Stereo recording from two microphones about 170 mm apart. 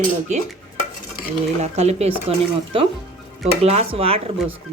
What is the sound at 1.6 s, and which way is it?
Speech, 40° right (ahead or behind).